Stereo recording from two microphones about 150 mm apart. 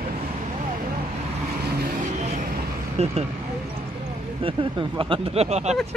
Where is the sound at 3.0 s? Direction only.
45° right (ahead or behind).